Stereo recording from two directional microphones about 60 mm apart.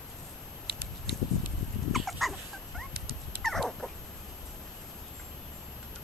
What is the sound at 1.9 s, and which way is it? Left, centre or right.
Dog, centre.